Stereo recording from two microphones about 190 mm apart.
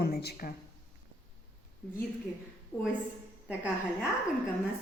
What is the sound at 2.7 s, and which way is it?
Speech, 15° left (ahead or behind).